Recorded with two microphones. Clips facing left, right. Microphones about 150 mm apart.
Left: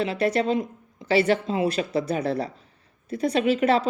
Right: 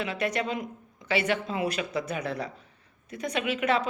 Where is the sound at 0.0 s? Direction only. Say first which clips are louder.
Left 6 dB; 30° left (ahead or behind).